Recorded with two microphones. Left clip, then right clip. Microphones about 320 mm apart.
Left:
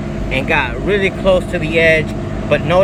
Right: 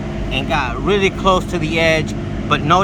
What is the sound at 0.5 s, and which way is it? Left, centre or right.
Speech, centre.